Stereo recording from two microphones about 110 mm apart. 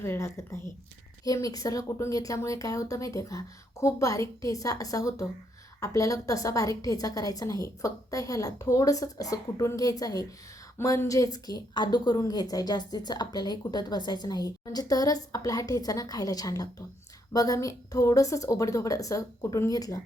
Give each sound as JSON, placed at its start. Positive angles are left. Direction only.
{"t": 0.0, "sound": "a woman's voice", "side_deg": 25}